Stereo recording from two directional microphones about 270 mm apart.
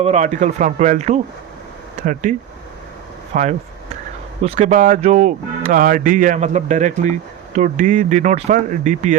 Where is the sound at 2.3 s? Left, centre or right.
Right.